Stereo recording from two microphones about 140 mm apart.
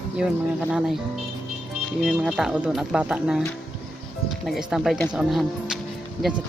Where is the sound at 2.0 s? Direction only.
Centre (ahead or behind).